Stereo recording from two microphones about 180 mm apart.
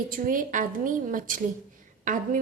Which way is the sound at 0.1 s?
50° right (ahead or behind).